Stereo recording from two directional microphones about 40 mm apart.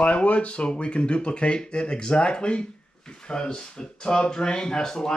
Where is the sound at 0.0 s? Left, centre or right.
Left.